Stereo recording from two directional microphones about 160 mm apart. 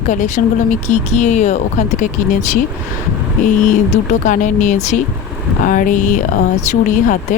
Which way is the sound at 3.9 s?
50° left (ahead or behind).